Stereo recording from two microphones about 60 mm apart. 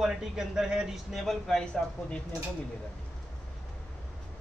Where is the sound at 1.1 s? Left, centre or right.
Centre.